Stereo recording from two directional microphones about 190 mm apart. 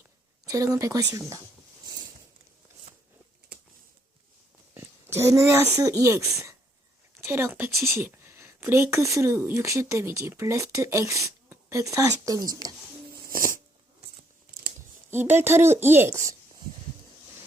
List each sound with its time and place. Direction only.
0.4 s speech: 15° right (ahead or behind)
4.7 s speech: 15° right (ahead or behind)
13.2 s a sound: 45° right (ahead or behind)
15.1 s speech: 10° right (ahead or behind)